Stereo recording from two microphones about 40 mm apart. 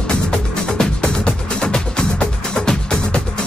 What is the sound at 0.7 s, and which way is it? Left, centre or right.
Music, centre.